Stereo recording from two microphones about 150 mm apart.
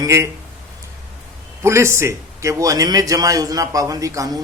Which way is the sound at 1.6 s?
20° right (ahead or behind).